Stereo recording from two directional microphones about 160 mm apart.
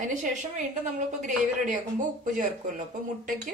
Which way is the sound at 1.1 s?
50° right (ahead or behind).